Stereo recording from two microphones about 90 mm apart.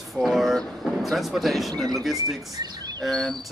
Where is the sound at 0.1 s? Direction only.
Centre (ahead or behind).